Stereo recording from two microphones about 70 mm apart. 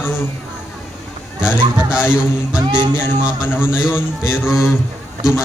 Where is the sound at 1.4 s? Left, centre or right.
Centre.